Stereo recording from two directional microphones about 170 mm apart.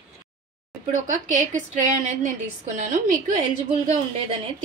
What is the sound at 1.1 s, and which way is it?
A woman's voice, 45° right (ahead or behind).